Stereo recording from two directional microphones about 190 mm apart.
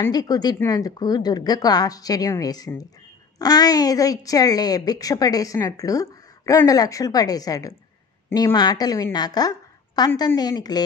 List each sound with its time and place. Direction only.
0.0 s a woman's voice: 20° left (ahead or behind)